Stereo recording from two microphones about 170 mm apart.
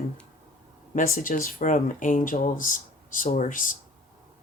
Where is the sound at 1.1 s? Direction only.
50° left (ahead or behind).